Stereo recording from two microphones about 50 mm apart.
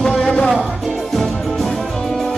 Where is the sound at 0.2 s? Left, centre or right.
Left.